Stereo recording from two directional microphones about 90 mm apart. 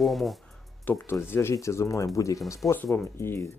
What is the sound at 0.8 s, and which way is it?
Speech, 25° left (ahead or behind).